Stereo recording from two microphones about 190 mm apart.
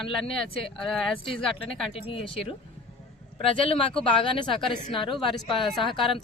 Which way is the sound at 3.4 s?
30° left (ahead or behind).